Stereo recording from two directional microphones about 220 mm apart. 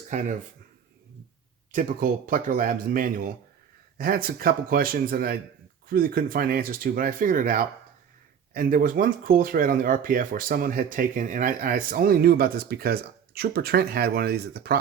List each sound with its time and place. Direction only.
1.7 s speech: 35° right (ahead or behind)